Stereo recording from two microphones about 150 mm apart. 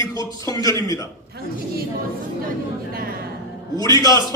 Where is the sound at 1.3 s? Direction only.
90° right.